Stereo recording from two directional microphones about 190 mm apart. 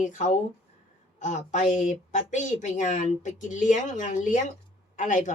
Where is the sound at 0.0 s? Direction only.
40° left (ahead or behind).